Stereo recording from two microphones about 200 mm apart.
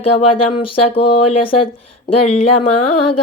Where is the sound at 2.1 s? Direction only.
30° left (ahead or behind).